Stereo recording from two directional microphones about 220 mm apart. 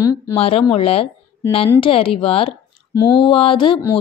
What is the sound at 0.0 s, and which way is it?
Speech, 15° left (ahead or behind).